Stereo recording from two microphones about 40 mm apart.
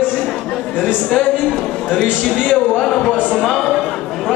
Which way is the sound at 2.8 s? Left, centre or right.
Centre.